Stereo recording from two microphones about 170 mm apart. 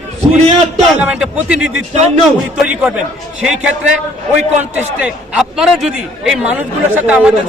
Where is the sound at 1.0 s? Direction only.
5° right (ahead or behind).